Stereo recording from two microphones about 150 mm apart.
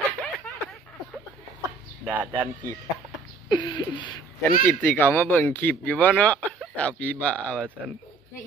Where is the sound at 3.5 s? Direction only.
30° left (ahead or behind).